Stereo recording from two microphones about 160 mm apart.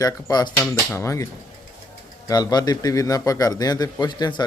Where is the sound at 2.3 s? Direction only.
25° left (ahead or behind).